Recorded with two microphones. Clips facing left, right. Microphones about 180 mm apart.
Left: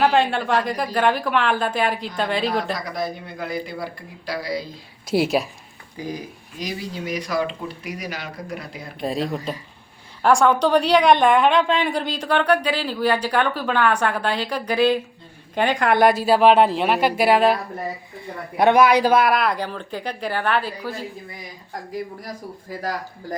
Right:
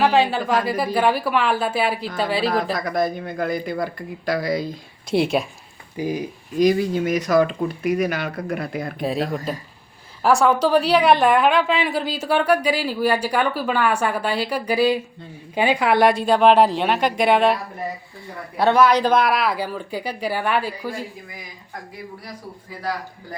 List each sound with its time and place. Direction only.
0.0 s a woman's voice: centre (ahead or behind)
2.7 s speech: 50° right (ahead or behind)
5.1 s a woman's voice: centre (ahead or behind)
6.0 s a woman's voice: 15° right (ahead or behind)
6.6 s speech: 55° right (ahead or behind)
9.0 s a woman's voice: centre (ahead or behind)
18.5 s a woman's voice: 15° left (ahead or behind); by 20.9 s 10° right (ahead or behind)